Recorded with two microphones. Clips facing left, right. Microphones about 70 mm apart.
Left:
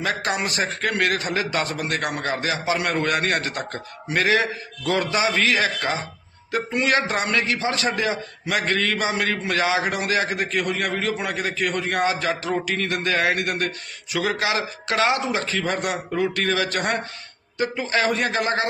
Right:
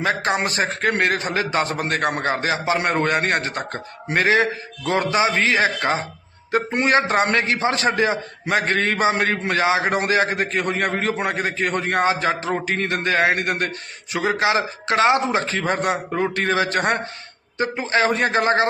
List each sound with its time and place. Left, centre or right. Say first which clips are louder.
0.0 s a man's voice: right 3 dB; right